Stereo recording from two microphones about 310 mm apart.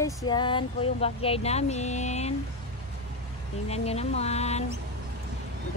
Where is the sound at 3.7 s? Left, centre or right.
Centre.